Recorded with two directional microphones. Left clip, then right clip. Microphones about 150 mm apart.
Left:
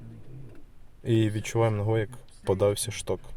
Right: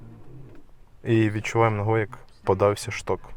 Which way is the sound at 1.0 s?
5° left (ahead or behind).